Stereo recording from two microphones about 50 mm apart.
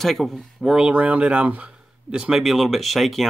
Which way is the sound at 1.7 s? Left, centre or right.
Centre.